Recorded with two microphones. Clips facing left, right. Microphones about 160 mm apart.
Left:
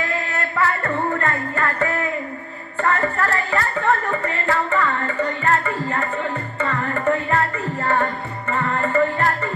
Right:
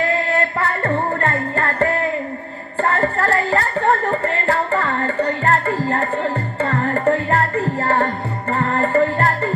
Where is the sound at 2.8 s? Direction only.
30° right (ahead or behind).